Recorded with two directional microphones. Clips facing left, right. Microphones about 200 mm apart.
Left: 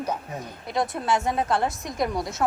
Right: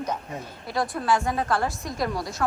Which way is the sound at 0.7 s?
20° left (ahead or behind).